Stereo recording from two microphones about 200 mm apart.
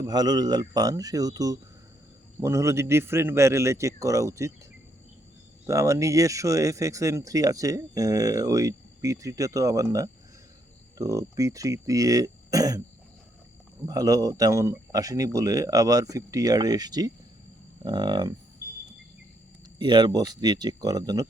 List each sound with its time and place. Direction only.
0.0 s a man's voice: 20° right (ahead or behind)
5.6 s speech: 15° right (ahead or behind)
13.8 s a man's voice: 15° right (ahead or behind)
19.8 s a man's voice: 20° right (ahead or behind)